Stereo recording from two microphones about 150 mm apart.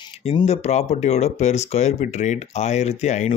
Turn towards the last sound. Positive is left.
turn(degrees=50)  # may be behind; listen again after turning